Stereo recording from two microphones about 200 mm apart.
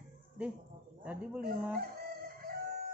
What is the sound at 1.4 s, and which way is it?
Fowl, 45° right (ahead or behind).